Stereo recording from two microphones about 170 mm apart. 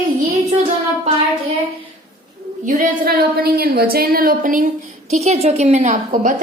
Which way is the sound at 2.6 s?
50° right (ahead or behind).